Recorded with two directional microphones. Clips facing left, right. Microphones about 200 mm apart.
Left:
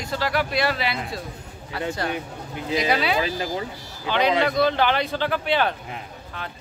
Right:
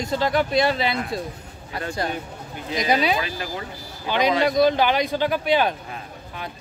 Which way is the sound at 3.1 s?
25° left (ahead or behind).